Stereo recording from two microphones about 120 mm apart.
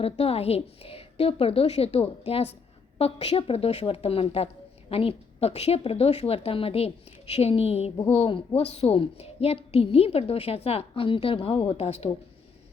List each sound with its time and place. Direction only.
0.0 s a woman's voice: 55° left (ahead or behind)